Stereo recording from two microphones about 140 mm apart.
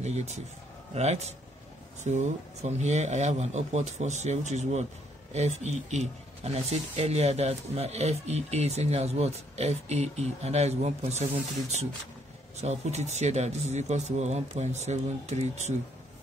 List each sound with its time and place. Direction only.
0.0 s speech: 55° right (ahead or behind)
12.5 s speech: 50° right (ahead or behind)